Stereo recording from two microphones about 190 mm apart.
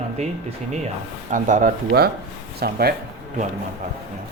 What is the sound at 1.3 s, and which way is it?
Speech, 40° right (ahead or behind).